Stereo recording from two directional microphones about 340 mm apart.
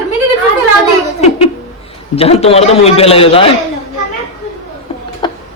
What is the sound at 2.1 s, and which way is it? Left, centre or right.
A man's voice, centre.